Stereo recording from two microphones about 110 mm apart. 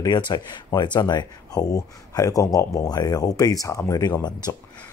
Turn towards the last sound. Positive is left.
turn(degrees=35)  # may be behind; listen again after turning